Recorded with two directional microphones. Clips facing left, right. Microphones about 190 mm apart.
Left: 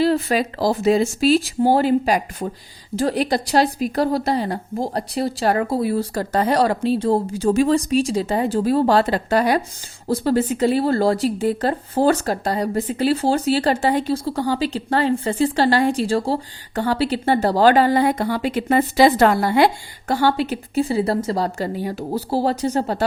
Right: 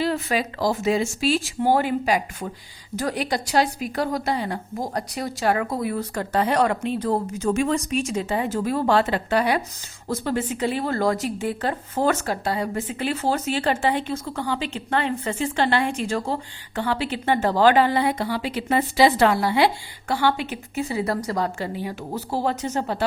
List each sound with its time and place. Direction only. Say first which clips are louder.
0.0 s speech: left 5 dB; 35° left (ahead or behind)